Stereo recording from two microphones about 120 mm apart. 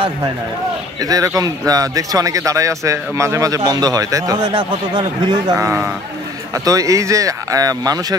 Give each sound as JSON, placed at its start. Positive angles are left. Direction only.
{"t": 1.0, "sound": "speech", "side_deg": -30}
{"t": 4.4, "sound": "speech", "side_deg": -50}
{"t": 6.5, "sound": "speech", "side_deg": -30}